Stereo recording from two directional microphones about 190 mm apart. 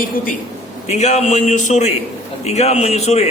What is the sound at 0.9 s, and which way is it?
A man's voice, 35° left (ahead or behind).